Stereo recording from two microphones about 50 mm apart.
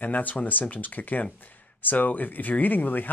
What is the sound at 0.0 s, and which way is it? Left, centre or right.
Speech, left.